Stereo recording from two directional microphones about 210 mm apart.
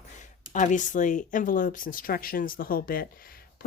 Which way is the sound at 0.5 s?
35° left (ahead or behind).